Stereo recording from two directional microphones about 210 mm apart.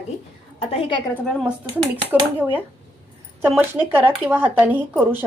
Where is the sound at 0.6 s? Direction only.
25° left (ahead or behind).